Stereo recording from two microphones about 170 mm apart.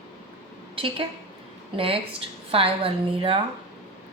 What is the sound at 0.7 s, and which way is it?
A woman's voice, 30° right (ahead or behind).